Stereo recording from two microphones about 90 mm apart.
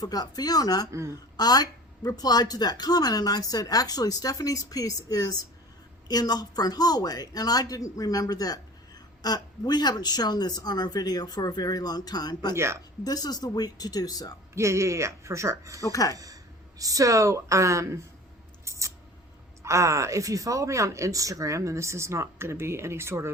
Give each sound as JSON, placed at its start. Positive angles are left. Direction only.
{"t": 0.0, "sound": "speech", "side_deg": 45}
{"t": 12.5, "sound": "speech", "side_deg": -30}
{"t": 13.1, "sound": "speech", "side_deg": 45}
{"t": 14.5, "sound": "speech", "side_deg": -35}
{"t": 15.8, "sound": "speech", "side_deg": 40}
{"t": 16.1, "sound": "speech", "side_deg": -40}
{"t": 18.6, "sound": "scissors", "side_deg": -35}
{"t": 19.6, "sound": "speech", "side_deg": -35}